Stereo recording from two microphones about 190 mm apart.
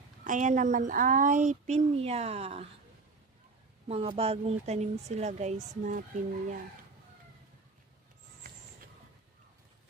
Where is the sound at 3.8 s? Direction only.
30° right (ahead or behind).